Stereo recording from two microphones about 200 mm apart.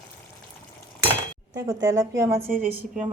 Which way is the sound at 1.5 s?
20° right (ahead or behind).